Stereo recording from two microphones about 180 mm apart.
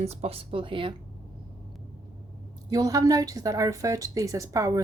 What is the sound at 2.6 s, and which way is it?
Speech, 20° right (ahead or behind).